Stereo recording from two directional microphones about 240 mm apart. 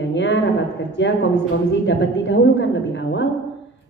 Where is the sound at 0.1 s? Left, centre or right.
Left.